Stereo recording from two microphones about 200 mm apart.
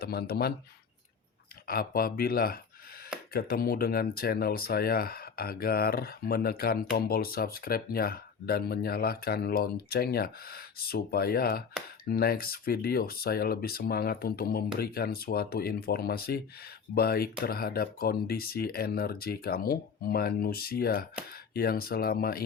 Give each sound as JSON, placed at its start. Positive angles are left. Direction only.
{"t": 0.0, "sound": "speech", "side_deg": 50}
{"t": 1.6, "sound": "speech", "side_deg": 45}